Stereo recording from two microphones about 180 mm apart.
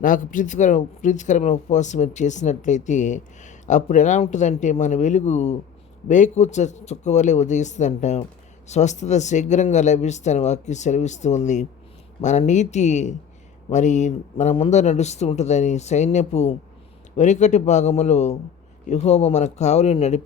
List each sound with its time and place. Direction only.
0.0 s speech: 45° left (ahead or behind)